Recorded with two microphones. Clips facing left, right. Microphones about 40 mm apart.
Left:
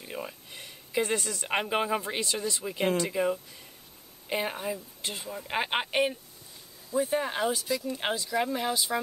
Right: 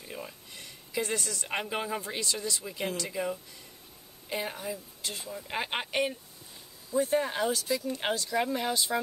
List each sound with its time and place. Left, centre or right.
0.0 s speech: centre
6.9 s speech: centre